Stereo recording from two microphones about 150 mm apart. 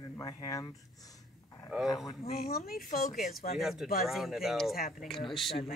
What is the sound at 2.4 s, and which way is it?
Speech, 90° left.